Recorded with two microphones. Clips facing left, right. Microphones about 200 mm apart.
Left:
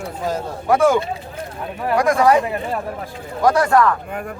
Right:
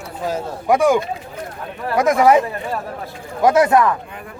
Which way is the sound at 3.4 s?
20° right (ahead or behind).